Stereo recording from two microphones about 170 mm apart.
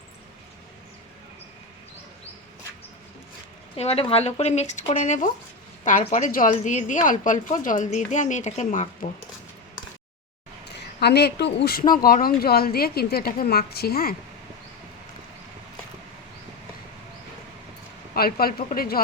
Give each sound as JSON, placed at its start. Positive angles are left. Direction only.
{"t": 3.8, "sound": "a woman's voice", "side_deg": 35}
{"t": 10.7, "sound": "speech", "side_deg": 80}
{"t": 18.1, "sound": "speech", "side_deg": 60}